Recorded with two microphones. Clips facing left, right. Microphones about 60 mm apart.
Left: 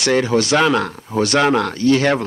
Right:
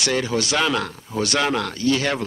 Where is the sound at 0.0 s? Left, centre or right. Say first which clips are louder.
Left 6 dB; left.